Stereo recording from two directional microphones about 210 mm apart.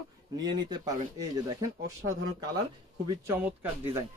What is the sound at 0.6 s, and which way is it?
Speech, 20° right (ahead or behind).